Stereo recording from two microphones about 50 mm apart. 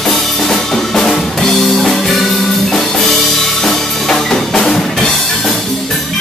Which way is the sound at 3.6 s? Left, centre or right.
Centre.